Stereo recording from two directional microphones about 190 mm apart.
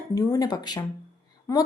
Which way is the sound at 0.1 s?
15° left (ahead or behind).